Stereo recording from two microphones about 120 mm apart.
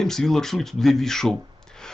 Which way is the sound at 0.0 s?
5° left (ahead or behind).